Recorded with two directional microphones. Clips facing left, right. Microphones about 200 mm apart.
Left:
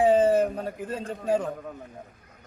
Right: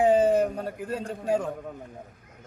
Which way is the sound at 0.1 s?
15° right (ahead or behind).